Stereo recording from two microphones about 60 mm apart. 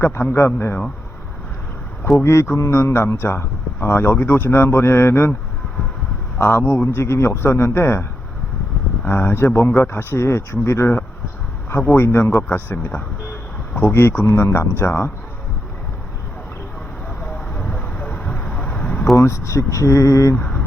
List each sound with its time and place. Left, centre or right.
0.0 s a man's voice: left
2.1 s a man's voice: left
6.4 s a man's voice: left
9.0 s a man's voice: left
11.9 s a man's voice: left
12.4 s a man's voice: left
17.5 s vehicle: centre
18.4 s a sound: centre
19.1 s speech: left